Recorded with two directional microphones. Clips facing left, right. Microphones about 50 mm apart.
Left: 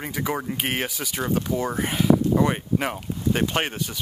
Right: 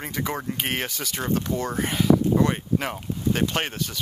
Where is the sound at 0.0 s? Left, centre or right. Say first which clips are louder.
Left 1 dB; centre.